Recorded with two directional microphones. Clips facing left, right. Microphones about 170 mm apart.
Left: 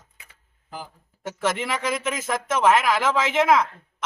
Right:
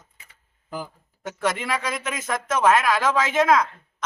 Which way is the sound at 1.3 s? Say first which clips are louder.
Even; 5° left (ahead or behind).